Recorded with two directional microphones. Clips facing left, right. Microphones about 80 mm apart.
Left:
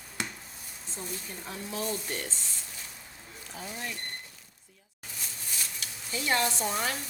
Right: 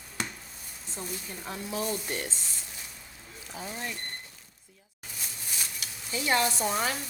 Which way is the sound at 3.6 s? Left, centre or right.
Right.